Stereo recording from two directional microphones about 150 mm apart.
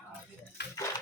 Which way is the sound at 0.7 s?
20° left (ahead or behind).